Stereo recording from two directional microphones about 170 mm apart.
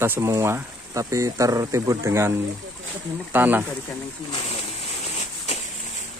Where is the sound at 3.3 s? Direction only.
10° right (ahead or behind).